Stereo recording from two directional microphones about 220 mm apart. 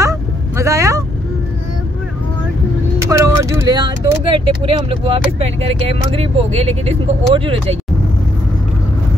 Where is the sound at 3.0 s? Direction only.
15° right (ahead or behind).